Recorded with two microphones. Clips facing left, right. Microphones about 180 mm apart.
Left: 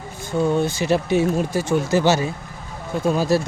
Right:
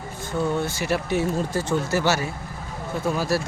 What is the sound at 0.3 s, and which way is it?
Speech, 20° left (ahead or behind).